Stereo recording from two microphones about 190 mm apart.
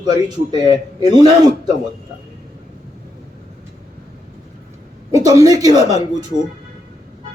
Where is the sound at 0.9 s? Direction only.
20° right (ahead or behind).